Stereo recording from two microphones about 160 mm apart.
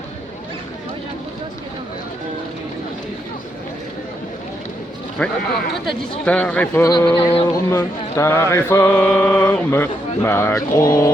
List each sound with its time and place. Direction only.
5.2 s mantra: 10° left (ahead or behind)
6.8 s speech: 20° left (ahead or behind)
7.5 s mantra: 20° left (ahead or behind)